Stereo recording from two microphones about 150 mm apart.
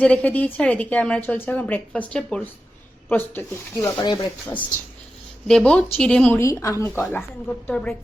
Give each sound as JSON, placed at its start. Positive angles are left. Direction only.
{"t": 0.0, "sound": "a woman's voice", "side_deg": 10}
{"t": 3.9, "sound": "speech", "side_deg": 25}
{"t": 5.5, "sound": "a woman's voice", "side_deg": 5}
{"t": 7.1, "sound": "a woman's voice", "side_deg": 10}